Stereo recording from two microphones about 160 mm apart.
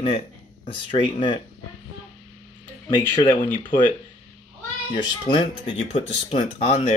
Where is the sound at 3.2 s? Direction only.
30° left (ahead or behind).